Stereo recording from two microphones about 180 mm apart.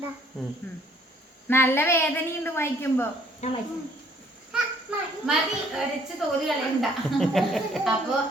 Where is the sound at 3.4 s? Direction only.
35° left (ahead or behind).